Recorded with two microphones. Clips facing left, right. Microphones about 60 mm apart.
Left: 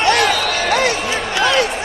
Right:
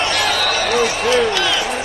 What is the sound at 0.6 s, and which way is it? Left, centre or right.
Basketball bounce, left.